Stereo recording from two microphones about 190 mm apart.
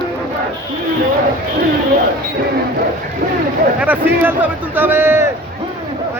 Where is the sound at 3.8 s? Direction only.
10° right (ahead or behind).